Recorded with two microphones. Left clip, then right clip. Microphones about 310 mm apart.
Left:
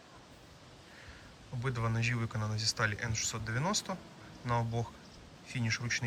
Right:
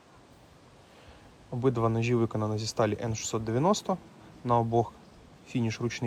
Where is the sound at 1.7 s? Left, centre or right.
Centre.